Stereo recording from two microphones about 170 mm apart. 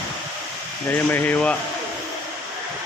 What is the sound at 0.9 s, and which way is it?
Speech, 10° left (ahead or behind).